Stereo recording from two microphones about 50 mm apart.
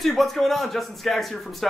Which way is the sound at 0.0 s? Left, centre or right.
Centre.